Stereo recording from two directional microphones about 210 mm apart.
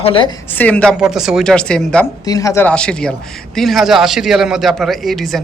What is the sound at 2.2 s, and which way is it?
Speech, 15° left (ahead or behind).